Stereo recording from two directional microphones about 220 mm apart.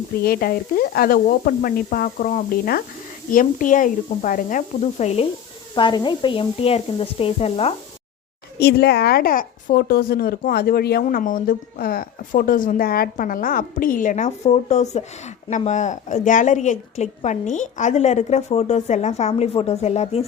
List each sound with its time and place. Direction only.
0.2 s speech: 45° left (ahead or behind); by 7.7 s 25° left (ahead or behind)
8.5 s speech: 45° left (ahead or behind); by 20.2 s 30° left (ahead or behind)